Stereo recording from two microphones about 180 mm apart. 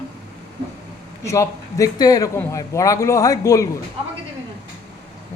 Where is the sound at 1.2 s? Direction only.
15° left (ahead or behind).